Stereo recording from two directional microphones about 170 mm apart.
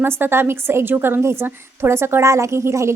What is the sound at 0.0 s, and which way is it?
A woman's voice, 15° right (ahead or behind).